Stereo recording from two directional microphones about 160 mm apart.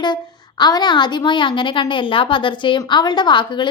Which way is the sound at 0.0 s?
30° left (ahead or behind).